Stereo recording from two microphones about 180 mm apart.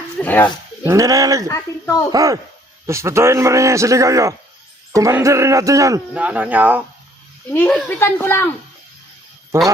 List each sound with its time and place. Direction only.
0.2 s a child's voice: 10° left (ahead or behind)
0.9 s speech: 20° right (ahead or behind)
1.5 s a child's voice: 15° left (ahead or behind)
2.1 s a man's voice: 20° right (ahead or behind)
6.1 s a man's voice: 5° right (ahead or behind)
7.5 s a child's voice: 10° left (ahead or behind)